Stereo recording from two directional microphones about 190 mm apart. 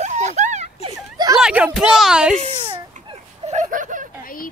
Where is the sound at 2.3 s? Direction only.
30° right (ahead or behind).